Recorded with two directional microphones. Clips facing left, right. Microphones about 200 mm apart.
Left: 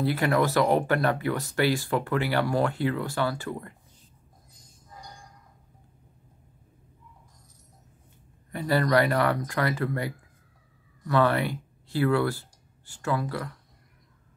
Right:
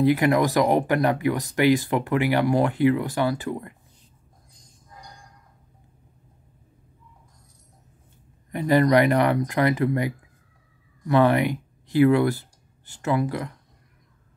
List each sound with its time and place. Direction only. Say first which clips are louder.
0.0 s speech: right 5 dB; 15° right (ahead or behind)
4.6 s a sound: even; 10° left (ahead or behind)
8.5 s speech: right 6 dB; 20° right (ahead or behind)